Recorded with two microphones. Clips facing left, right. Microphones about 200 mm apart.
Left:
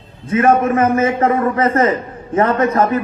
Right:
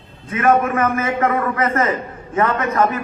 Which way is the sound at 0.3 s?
30° left (ahead or behind).